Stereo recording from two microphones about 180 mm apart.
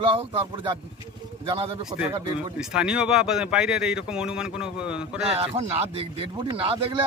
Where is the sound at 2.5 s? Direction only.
5° right (ahead or behind).